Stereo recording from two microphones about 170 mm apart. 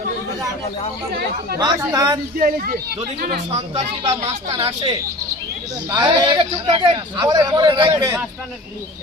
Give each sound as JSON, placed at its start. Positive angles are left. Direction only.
{"t": 1.5, "sound": "speech", "side_deg": -20}
{"t": 2.4, "sound": "speech", "side_deg": -55}
{"t": 3.5, "sound": "speech", "side_deg": -40}
{"t": 5.9, "sound": "speech", "side_deg": -25}
{"t": 8.0, "sound": "speech", "side_deg": -10}